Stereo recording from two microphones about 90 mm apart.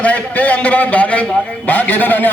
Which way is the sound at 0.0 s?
15° left (ahead or behind).